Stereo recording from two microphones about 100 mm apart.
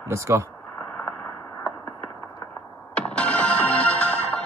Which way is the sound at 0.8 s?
15° left (ahead or behind).